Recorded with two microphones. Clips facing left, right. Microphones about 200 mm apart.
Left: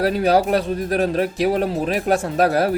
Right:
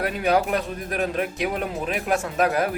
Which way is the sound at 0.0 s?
35° left (ahead or behind).